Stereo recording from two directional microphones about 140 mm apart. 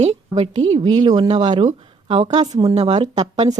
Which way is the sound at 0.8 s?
30° right (ahead or behind).